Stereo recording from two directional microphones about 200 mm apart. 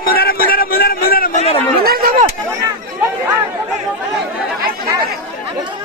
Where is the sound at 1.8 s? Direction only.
45° right (ahead or behind).